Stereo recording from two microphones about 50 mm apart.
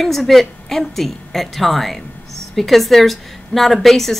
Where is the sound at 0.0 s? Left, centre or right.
Centre.